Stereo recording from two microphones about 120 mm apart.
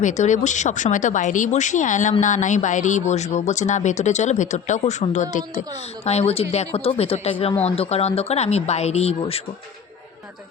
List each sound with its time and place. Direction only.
0.0 s speech: 85° left
6.1 s speech: 60° left (ahead or behind)